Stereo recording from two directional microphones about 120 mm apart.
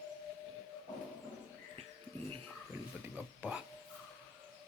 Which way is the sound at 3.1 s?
10° right (ahead or behind).